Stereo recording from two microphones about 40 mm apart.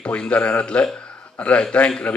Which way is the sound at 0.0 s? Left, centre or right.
Left.